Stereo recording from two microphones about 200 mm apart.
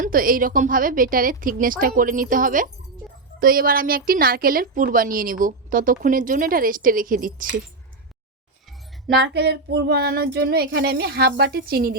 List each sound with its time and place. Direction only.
0.0 s a woman's voice: 45° right (ahead or behind)
9.2 s a woman's voice: 55° right (ahead or behind)